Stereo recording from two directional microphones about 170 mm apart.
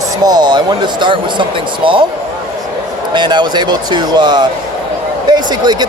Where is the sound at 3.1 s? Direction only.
25° right (ahead or behind).